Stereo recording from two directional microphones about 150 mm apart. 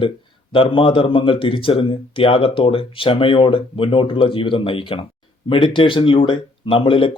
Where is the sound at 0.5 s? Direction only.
35° left (ahead or behind).